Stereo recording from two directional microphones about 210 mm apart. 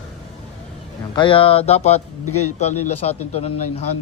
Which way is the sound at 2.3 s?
90° left.